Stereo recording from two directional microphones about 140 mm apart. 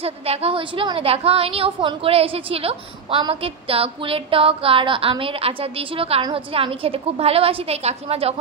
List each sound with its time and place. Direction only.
0.0 s a woman's voice: 45° right (ahead or behind)